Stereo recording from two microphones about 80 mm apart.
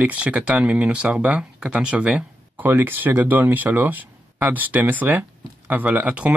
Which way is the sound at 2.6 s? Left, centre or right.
Right.